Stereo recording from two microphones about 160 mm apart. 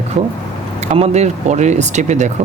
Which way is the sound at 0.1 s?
40° right (ahead or behind).